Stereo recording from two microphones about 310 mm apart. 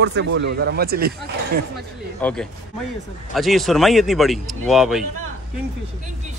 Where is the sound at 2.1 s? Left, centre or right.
Centre.